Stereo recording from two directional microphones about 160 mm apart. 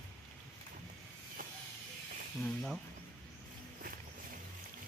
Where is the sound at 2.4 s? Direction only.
5° left (ahead or behind).